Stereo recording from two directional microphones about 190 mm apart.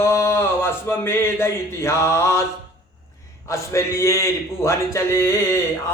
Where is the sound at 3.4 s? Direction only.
15° left (ahead or behind).